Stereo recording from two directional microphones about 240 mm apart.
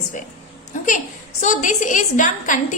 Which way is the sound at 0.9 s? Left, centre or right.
Left.